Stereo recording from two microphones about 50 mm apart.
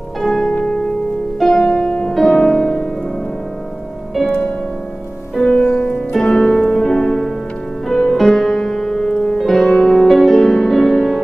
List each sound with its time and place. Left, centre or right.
0.2 s music: centre
5.5 s music: left
5.9 s music: centre